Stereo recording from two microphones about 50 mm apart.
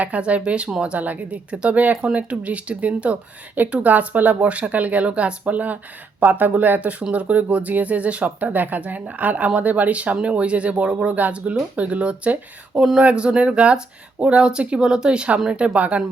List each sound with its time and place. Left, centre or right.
0.0 s speech: right
12.7 s speech: centre
13.0 s speech: right